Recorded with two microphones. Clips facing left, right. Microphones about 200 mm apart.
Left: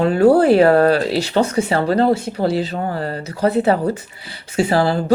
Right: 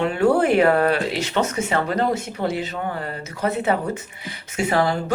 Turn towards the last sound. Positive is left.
turn(degrees=30)  # may be behind; listen again after turning